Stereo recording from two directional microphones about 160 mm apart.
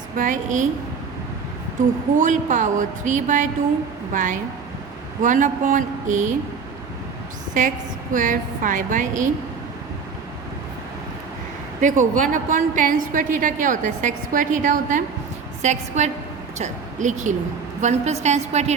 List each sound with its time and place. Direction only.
0.2 s a woman's voice: 55° right (ahead or behind)
2.1 s a woman's voice: 50° right (ahead or behind)
8.1 s a woman's voice: 55° right (ahead or behind)
11.8 s a woman's voice: 55° right (ahead or behind)